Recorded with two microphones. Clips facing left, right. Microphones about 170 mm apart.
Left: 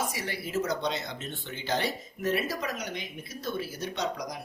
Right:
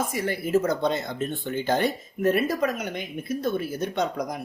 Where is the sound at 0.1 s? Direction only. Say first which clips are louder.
Right 9 dB; 50° right (ahead or behind).